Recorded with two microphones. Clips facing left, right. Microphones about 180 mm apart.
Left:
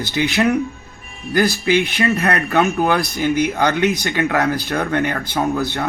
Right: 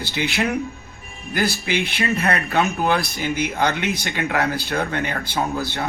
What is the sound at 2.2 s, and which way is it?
Speech, 55° left (ahead or behind).